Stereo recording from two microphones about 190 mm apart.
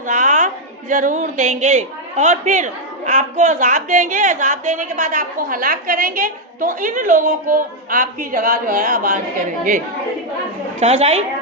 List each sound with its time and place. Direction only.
0.1 s a woman's voice: 40° right (ahead or behind)
10.8 s a woman's voice: 35° right (ahead or behind)